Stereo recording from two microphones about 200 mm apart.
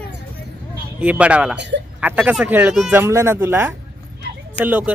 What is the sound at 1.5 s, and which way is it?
Speech, 60° right (ahead or behind).